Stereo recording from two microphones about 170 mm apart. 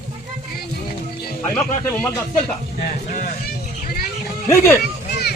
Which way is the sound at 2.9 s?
50° left (ahead or behind).